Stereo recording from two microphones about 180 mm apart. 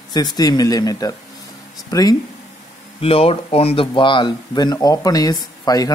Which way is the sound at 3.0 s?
30° left (ahead or behind).